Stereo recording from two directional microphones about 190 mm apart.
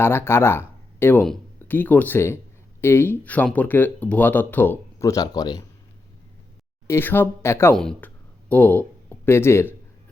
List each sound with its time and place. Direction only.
0.0 s speech: 10° left (ahead or behind)
6.8 s speech: 10° left (ahead or behind)